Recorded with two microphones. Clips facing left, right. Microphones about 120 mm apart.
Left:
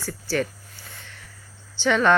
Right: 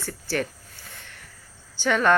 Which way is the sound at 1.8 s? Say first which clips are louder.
Left 2 dB; 50° right (ahead or behind).